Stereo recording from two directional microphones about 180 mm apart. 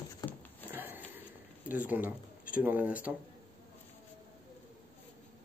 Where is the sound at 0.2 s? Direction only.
25° left (ahead or behind).